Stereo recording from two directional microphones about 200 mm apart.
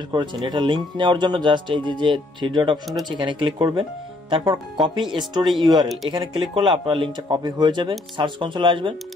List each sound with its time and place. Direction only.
0.1 s speech: 20° right (ahead or behind)
4.8 s speech: 25° right (ahead or behind)